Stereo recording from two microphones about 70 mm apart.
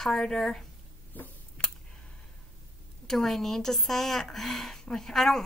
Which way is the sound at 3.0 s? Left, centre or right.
Centre.